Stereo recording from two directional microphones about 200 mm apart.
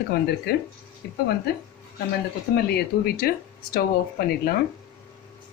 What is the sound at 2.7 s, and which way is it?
Speech, 50° left (ahead or behind).